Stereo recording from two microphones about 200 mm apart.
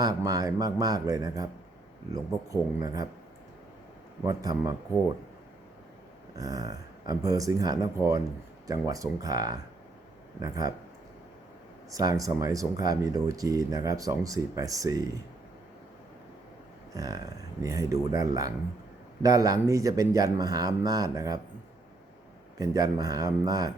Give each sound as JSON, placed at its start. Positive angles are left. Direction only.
{"t": 0.0, "sound": "speech", "side_deg": -20}
{"t": 4.2, "sound": "speech", "side_deg": -15}
{"t": 6.3, "sound": "speech", "side_deg": -20}
{"t": 11.9, "sound": "speech", "side_deg": -20}
{"t": 16.9, "sound": "speech", "side_deg": -20}
{"t": 22.5, "sound": "speech", "side_deg": -15}